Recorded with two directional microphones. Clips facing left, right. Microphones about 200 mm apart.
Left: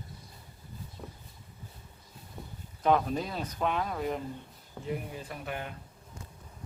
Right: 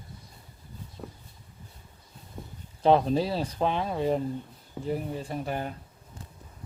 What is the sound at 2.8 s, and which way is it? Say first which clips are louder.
Speech: right 5 dB; 30° right (ahead or behind).